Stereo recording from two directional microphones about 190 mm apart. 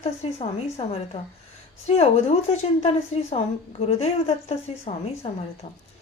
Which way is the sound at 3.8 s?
35° left (ahead or behind).